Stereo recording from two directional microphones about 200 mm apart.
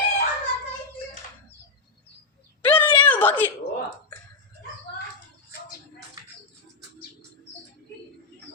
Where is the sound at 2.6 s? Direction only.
10° left (ahead or behind).